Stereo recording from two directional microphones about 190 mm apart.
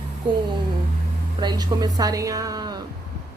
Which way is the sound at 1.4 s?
20° right (ahead or behind).